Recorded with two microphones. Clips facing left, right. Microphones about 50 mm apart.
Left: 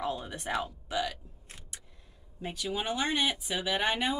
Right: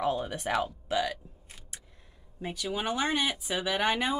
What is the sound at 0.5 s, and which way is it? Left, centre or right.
Speech, right.